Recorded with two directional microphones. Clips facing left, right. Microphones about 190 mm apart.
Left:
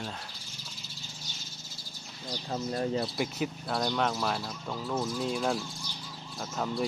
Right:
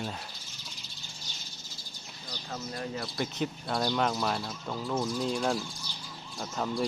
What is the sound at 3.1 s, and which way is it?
Speech, 5° left (ahead or behind).